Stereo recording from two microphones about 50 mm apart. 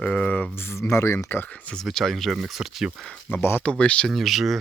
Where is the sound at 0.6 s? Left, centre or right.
Left.